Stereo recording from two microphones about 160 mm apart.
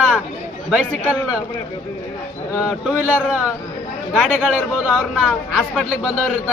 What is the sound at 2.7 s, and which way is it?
A man's voice, 5° right (ahead or behind).